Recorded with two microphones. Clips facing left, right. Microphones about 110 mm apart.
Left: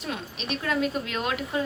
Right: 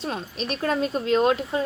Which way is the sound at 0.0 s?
35° right (ahead or behind).